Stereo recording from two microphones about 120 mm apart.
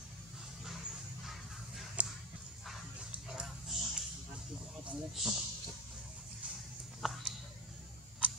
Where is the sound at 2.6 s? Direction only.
Centre (ahead or behind).